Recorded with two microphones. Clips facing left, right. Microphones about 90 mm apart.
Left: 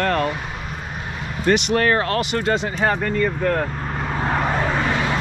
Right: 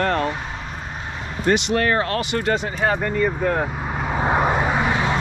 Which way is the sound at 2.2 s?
20° left (ahead or behind).